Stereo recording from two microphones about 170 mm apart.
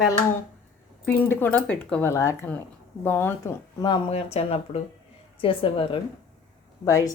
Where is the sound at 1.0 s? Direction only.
10° left (ahead or behind).